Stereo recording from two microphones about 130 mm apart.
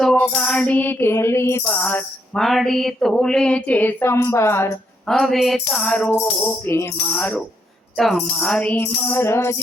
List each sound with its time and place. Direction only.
0.0 s music: 5° left (ahead or behind); by 4.7 s 20° left (ahead or behind)
5.0 s a sound: centre (ahead or behind)
5.6 s music: 5° left (ahead or behind)
6.4 s music: 20° left (ahead or behind)
7.9 s music: centre (ahead or behind); by 9.6 s 20° left (ahead or behind)